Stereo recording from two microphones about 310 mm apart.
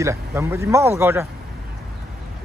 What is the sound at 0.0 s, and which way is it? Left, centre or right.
A man's voice, centre.